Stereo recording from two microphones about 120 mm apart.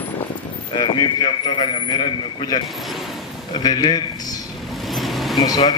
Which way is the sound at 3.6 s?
35° left (ahead or behind).